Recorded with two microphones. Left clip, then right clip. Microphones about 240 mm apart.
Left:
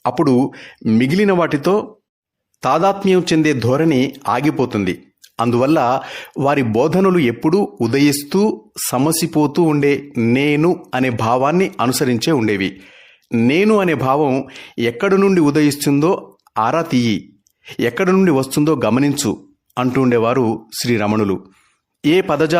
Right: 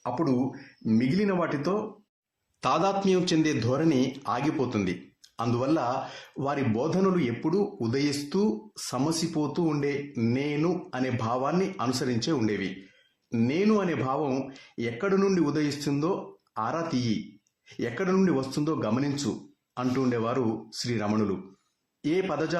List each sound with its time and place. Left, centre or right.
0.0 s a man's voice: left
2.6 s a man's voice: left